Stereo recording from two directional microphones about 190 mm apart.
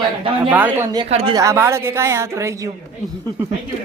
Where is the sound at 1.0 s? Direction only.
30° right (ahead or behind).